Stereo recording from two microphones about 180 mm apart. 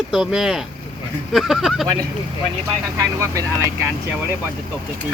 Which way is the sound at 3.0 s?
15° right (ahead or behind).